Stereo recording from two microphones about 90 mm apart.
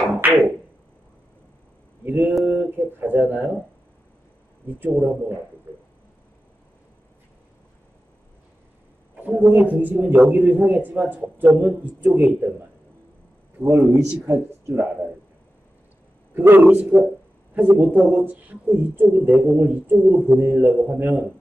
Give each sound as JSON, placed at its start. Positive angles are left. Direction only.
{"t": 0.2, "sound": "a sound", "side_deg": -15}
{"t": 2.0, "sound": "a man's voice", "side_deg": -20}
{"t": 4.6, "sound": "a man's voice", "side_deg": -20}
{"t": 9.2, "sound": "a man's voice", "side_deg": -20}
{"t": 13.7, "sound": "a man's voice", "side_deg": -30}
{"t": 16.3, "sound": "a man's voice", "side_deg": -20}